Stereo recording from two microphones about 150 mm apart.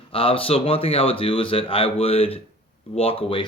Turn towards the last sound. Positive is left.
turn(degrees=35)  # may be behind; listen again after turning